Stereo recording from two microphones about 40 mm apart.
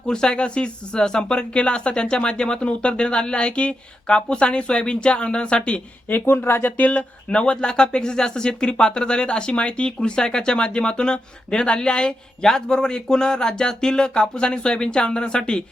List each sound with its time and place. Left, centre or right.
0.1 s speech: left
6.1 s speech: left
6.7 s speech: left